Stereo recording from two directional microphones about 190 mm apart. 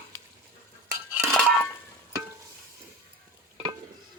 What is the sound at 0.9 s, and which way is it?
Cutlery, 15° right (ahead or behind).